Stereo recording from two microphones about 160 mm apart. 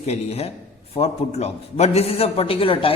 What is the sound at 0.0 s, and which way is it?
A man's voice, 40° left (ahead or behind).